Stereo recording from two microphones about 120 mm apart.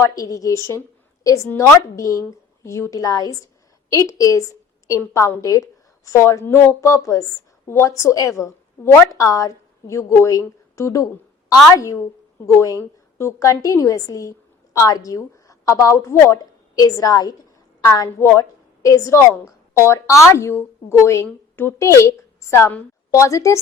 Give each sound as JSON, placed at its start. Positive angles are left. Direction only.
{"t": 0.0, "sound": "a woman's voice", "side_deg": 30}
{"t": 0.7, "sound": "a sound", "side_deg": 25}
{"t": 1.7, "sound": "a woman's voice", "side_deg": 25}